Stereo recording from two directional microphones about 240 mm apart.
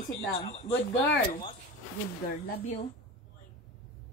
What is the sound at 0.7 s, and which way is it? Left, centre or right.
Speech, left.